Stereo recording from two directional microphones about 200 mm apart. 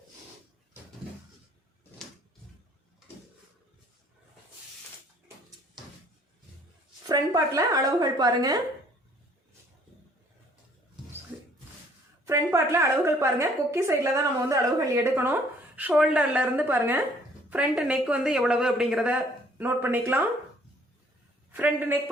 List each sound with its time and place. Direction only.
7.1 s a woman's voice: 15° right (ahead or behind)
12.2 s a sound: 15° right (ahead or behind)
14.5 s a woman's voice: 15° right (ahead or behind)
21.5 s a woman's voice: 10° right (ahead or behind)